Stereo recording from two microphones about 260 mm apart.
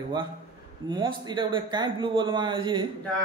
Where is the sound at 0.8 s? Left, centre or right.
Centre.